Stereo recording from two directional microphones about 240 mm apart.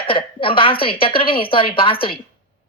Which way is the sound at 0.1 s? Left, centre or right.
Left.